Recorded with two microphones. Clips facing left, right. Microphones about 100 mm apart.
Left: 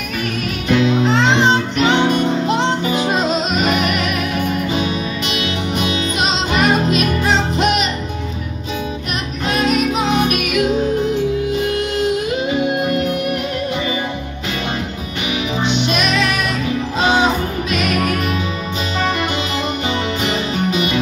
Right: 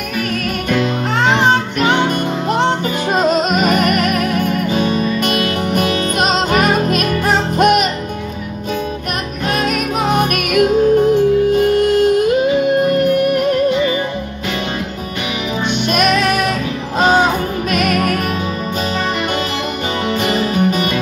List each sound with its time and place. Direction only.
0.7 s music: 45° right (ahead or behind)
10.0 s music: 50° right (ahead or behind)
15.9 s music: 50° right (ahead or behind)
17.6 s music: 50° right (ahead or behind)
20.2 s music: 45° right (ahead or behind)